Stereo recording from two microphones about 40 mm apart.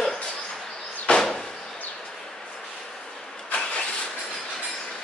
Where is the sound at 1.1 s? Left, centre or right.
Left.